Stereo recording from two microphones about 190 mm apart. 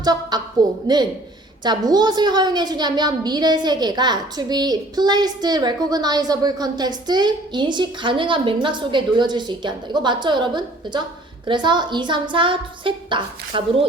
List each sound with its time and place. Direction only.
0.0 s a woman's voice: 20° right (ahead or behind)